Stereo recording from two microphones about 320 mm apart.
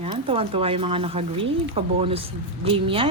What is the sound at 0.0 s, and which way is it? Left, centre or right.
A woman's voice, centre.